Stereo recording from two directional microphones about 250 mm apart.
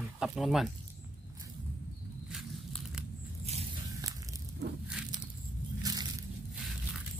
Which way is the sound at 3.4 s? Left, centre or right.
Right.